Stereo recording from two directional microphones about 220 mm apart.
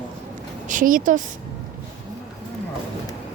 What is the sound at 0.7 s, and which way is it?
Speech, 35° right (ahead or behind).